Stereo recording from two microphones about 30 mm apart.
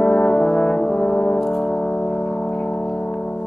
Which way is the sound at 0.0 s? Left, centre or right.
Centre.